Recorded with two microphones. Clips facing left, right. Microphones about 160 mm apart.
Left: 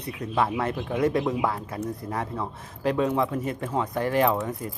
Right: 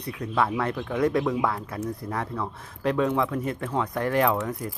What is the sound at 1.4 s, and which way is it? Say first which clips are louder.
Speech: even; 30° left (ahead or behind).